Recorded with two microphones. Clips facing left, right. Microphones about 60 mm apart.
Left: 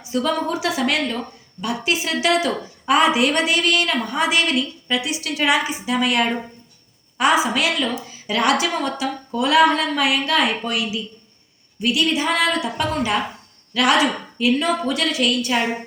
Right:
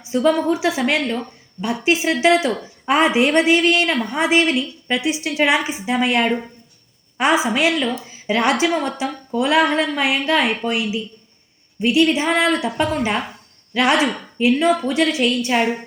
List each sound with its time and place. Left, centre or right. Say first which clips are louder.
0.1 s a woman's voice: right 4 dB; right
11.8 s a woman's voice: right 4 dB; right